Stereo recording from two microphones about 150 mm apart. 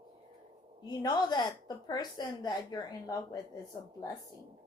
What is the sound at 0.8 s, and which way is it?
A woman's voice, 25° left (ahead or behind).